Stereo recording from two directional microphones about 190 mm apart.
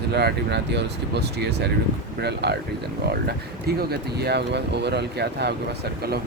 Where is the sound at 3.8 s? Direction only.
60° right (ahead or behind).